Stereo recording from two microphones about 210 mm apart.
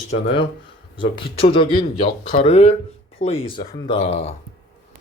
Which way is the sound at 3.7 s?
20° left (ahead or behind).